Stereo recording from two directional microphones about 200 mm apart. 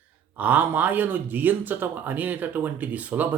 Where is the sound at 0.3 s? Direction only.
10° right (ahead or behind).